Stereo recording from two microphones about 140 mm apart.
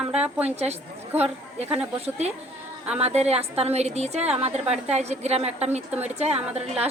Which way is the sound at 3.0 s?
50° right (ahead or behind).